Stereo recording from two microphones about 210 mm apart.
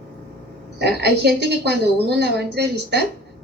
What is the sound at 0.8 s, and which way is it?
A woman's voice, 50° right (ahead or behind).